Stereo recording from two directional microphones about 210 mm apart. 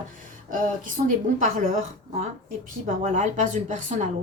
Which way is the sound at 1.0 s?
40° right (ahead or behind).